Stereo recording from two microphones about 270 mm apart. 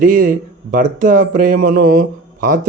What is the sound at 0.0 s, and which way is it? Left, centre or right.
A man's voice, right.